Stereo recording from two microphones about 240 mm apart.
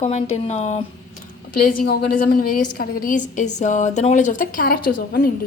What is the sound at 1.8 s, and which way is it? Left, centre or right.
A woman's voice, left.